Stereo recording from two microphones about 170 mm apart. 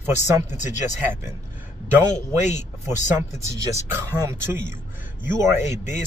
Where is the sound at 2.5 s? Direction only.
15° right (ahead or behind).